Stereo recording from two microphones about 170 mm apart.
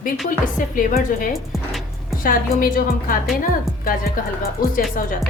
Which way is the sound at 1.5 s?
Centre (ahead or behind).